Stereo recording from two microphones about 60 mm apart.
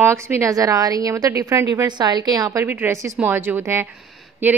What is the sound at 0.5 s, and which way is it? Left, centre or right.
A woman's voice, right.